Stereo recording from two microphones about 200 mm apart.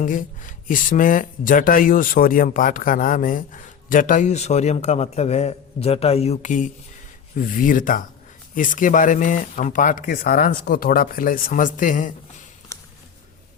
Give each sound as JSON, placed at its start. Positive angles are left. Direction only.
{"t": 0.0, "sound": "speech", "side_deg": 40}